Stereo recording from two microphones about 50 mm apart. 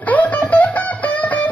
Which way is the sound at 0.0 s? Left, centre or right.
Left.